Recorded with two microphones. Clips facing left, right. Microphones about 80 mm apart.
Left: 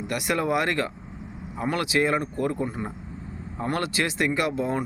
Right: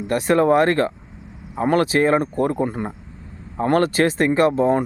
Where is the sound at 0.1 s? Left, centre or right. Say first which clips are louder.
Right 9 dB; right.